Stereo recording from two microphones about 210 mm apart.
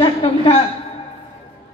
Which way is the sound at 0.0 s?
30° left (ahead or behind).